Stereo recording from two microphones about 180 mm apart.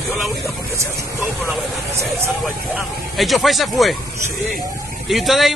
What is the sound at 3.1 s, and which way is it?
Speech, centre (ahead or behind).